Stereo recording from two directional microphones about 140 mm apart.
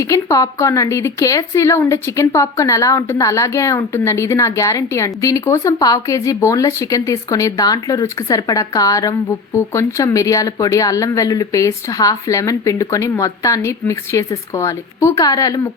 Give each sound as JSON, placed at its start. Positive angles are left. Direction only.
{"t": 0.0, "sound": "speech", "side_deg": 25}